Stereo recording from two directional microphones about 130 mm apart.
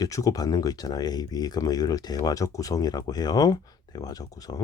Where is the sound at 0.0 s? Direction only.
25° left (ahead or behind).